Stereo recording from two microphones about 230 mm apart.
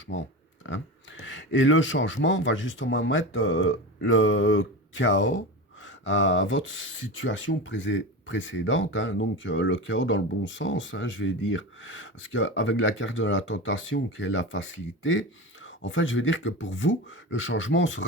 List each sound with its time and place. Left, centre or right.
0.1 s speech: left